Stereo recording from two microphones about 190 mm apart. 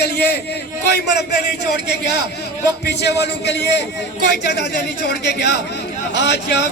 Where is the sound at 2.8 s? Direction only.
60° left (ahead or behind).